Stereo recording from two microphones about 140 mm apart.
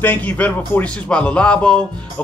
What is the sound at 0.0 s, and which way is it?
Speech, 10° left (ahead or behind).